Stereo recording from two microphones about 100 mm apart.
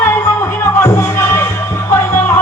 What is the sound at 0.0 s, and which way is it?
Music, 25° left (ahead or behind).